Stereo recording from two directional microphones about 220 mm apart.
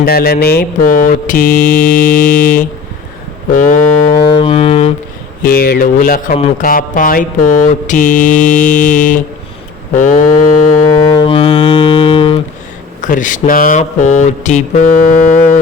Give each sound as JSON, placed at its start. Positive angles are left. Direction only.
{"t": 0.0, "sound": "mantra", "side_deg": 45}
{"t": 4.2, "sound": "music", "side_deg": 25}
{"t": 5.4, "sound": "mantra", "side_deg": 45}
{"t": 9.9, "sound": "a sound", "side_deg": 35}
{"t": 11.1, "sound": "music", "side_deg": 25}
{"t": 13.0, "sound": "mantra", "side_deg": 35}